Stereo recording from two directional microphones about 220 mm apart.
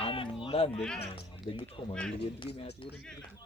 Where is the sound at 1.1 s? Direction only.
20° left (ahead or behind).